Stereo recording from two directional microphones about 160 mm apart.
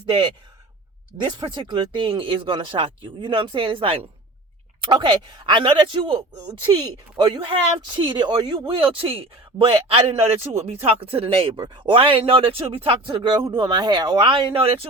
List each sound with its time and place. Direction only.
0.0 s speech: 30° right (ahead or behind)
7.2 s speech: 25° right (ahead or behind)